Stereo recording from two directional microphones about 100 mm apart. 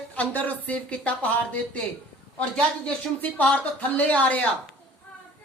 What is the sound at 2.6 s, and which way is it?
A woman's voice, 10° left (ahead or behind).